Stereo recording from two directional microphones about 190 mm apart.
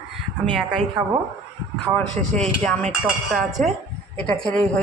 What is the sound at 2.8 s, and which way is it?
Speech, 35° right (ahead or behind).